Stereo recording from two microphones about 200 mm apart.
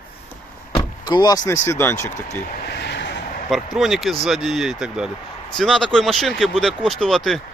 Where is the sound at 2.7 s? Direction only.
60° left (ahead or behind).